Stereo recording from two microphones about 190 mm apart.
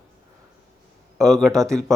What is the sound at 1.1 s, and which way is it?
Speech, centre (ahead or behind).